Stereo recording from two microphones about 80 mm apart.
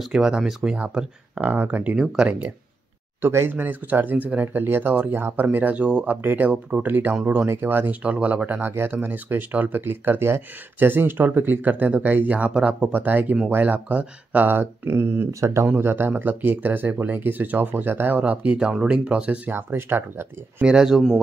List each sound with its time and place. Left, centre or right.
0.1 s speech: centre
0.7 s speech: centre
3.2 s speech: right; by 19.5 s centre
19.5 s speech: right
20.6 s speech: centre